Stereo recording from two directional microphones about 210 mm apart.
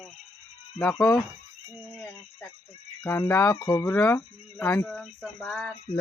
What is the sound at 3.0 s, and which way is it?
Speech, 10° left (ahead or behind).